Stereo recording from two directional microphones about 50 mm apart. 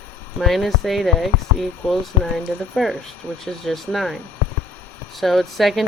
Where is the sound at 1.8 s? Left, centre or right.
Left.